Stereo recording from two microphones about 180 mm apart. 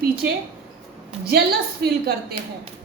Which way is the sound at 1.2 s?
60° right (ahead or behind).